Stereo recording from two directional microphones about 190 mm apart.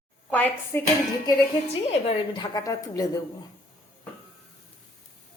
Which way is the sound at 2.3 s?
20° left (ahead or behind).